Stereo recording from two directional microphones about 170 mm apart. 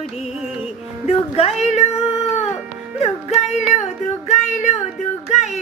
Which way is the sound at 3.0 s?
40° left (ahead or behind).